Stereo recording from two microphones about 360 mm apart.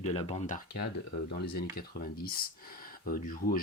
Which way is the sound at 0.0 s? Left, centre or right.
Centre.